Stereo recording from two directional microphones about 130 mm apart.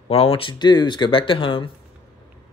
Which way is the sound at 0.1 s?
45° left (ahead or behind).